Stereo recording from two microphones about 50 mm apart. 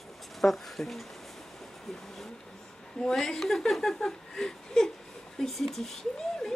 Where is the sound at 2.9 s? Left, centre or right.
Centre.